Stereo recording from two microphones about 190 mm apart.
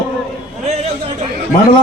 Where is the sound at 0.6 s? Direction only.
35° right (ahead or behind).